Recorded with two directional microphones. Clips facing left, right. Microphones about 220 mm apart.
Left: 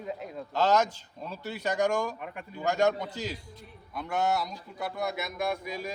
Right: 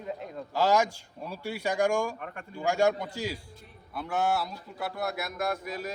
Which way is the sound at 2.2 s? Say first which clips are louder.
Even; 5° left (ahead or behind).